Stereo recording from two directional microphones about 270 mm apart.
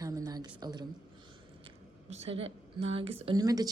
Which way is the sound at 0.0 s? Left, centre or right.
Centre.